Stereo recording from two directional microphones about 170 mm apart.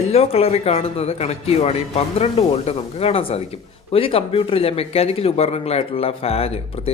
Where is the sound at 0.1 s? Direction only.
35° left (ahead or behind).